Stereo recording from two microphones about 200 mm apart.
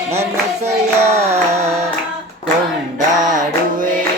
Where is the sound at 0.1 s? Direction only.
30° right (ahead or behind).